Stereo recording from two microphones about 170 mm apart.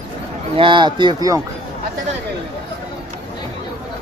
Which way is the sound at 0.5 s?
30° right (ahead or behind).